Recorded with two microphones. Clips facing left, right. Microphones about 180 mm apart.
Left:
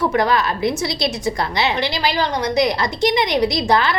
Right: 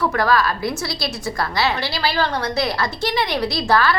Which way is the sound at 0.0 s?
20° left (ahead or behind).